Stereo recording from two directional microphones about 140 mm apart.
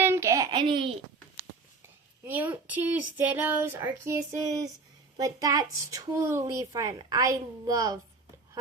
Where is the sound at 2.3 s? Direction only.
10° right (ahead or behind).